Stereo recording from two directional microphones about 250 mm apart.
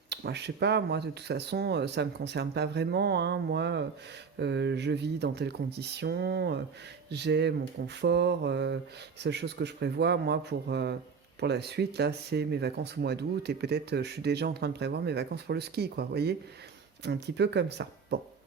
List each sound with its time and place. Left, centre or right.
0.1 s speech: right